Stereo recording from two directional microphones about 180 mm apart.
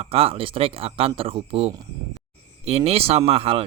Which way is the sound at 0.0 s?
30° right (ahead or behind).